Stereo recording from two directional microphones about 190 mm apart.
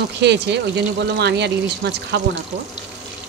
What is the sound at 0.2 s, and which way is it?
Speech, 65° right (ahead or behind).